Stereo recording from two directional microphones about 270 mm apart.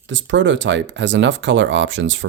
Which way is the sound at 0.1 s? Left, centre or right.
Right.